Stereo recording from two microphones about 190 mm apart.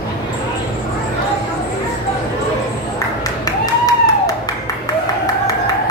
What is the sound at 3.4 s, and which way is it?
Clapping, 20° left (ahead or behind).